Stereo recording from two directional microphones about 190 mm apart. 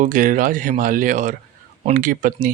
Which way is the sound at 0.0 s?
45° right (ahead or behind).